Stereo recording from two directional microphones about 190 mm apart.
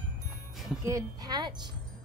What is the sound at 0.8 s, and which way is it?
Speech, 20° right (ahead or behind).